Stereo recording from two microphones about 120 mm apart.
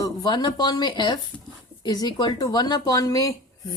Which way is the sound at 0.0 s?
35° left (ahead or behind).